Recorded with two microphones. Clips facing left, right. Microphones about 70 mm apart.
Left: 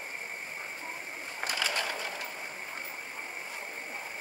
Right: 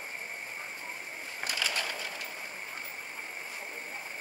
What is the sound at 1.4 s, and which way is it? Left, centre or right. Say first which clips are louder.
Ratchet: left 2 dB; left.